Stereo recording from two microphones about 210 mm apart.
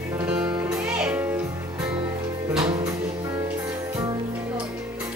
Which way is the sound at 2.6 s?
20° right (ahead or behind).